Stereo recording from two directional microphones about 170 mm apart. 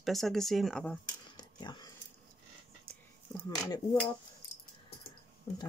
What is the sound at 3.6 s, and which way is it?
Speech, 20° left (ahead or behind).